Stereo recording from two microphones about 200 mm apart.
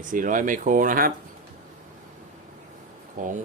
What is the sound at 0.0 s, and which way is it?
Speech, 40° right (ahead or behind).